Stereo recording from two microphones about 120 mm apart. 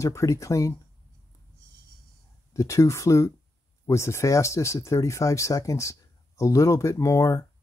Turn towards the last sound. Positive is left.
turn(degrees=25)  # may be behind; listen again after turning